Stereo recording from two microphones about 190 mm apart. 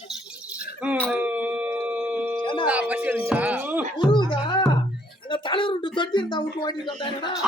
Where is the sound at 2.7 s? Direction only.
5° right (ahead or behind).